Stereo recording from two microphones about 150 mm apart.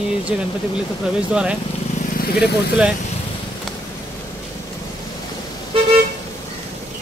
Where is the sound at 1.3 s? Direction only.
5° right (ahead or behind).